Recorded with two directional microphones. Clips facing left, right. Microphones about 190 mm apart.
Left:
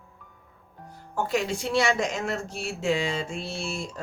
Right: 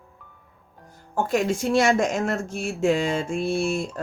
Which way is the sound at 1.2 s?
50° right (ahead or behind).